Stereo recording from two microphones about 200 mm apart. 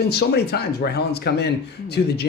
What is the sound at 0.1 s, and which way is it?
Speech, 55° left (ahead or behind).